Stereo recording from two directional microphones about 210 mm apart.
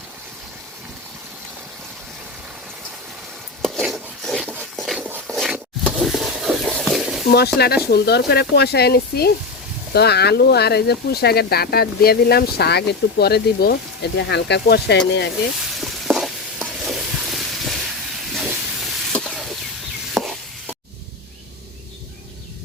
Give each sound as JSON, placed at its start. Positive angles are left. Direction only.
{"t": 3.6, "sound": "a sound", "side_deg": 0}
{"t": 7.3, "sound": "speech", "side_deg": 50}
{"t": 15.6, "sound": "stir", "side_deg": 0}
{"t": 18.3, "sound": "steam", "side_deg": 0}
{"t": 20.1, "sound": "chopping", "side_deg": 0}